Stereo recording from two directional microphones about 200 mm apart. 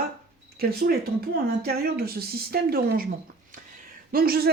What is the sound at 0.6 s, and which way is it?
Speech, 50° right (ahead or behind).